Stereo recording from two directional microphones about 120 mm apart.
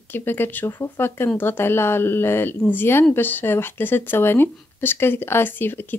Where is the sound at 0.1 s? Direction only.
20° left (ahead or behind).